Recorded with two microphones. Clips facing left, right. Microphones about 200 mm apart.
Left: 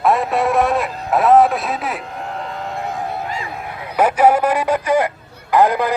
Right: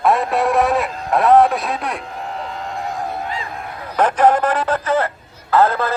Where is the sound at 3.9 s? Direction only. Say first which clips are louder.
Left 1 dB; 10° left (ahead or behind).